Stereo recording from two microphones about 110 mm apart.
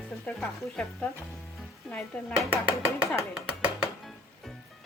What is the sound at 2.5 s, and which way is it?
Speech, 25° left (ahead or behind).